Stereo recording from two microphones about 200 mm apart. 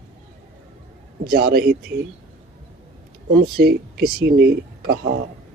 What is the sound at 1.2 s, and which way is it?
Speech, 50° right (ahead or behind).